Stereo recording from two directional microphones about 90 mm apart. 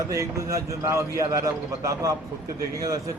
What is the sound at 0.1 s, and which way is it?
A man's voice, 35° right (ahead or behind).